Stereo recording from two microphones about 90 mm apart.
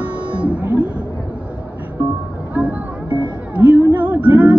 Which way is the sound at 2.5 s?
15° right (ahead or behind).